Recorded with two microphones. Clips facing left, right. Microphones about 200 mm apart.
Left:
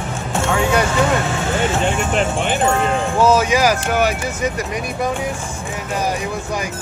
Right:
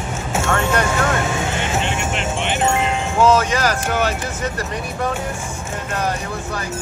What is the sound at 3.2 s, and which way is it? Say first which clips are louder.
Speech: left 1 dB; 10° left (ahead or behind).